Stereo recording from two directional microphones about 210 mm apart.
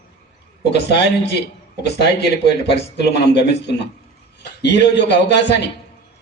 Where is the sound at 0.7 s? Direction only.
55° left (ahead or behind).